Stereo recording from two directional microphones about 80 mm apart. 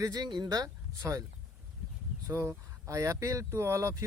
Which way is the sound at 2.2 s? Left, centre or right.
Right.